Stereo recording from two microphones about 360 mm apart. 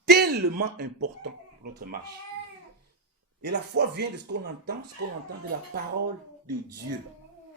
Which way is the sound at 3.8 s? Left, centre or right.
Right.